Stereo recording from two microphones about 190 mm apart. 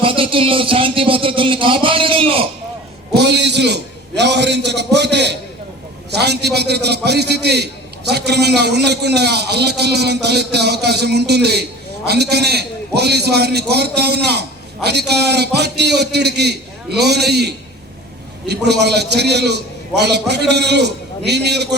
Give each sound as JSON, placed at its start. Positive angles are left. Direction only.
{"t": 0.0, "sound": "a man's voice", "side_deg": -30}
{"t": 3.2, "sound": "a man's voice", "side_deg": -65}